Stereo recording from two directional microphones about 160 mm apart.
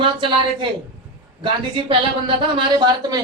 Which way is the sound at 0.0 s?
30° right (ahead or behind).